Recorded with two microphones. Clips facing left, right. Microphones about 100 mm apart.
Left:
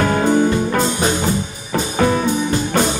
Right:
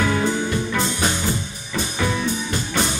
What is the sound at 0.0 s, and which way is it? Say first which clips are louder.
Music: left 6 dB; 50° left (ahead or behind).